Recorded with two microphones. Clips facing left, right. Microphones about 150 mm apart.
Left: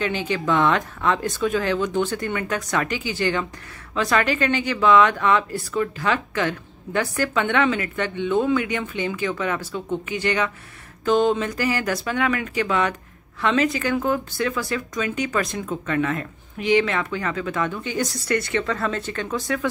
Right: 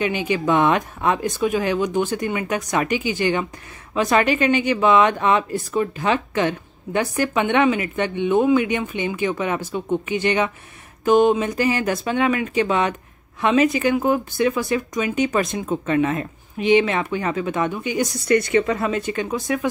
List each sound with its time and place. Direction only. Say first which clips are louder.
0.0 s speech: right 3 dB; 15° right (ahead or behind)